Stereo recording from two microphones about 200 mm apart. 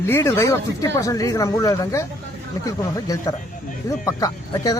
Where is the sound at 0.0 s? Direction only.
15° left (ahead or behind).